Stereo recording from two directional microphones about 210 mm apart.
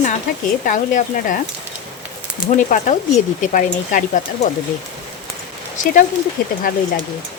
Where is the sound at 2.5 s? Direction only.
35° left (ahead or behind).